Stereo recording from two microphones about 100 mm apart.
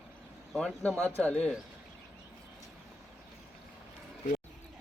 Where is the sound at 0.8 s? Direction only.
10° left (ahead or behind).